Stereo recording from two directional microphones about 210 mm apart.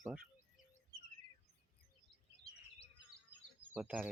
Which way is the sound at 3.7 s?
5° right (ahead or behind).